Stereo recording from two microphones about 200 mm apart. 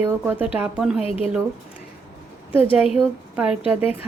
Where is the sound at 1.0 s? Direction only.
30° left (ahead or behind).